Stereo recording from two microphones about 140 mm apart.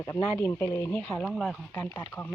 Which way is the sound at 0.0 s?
15° left (ahead or behind).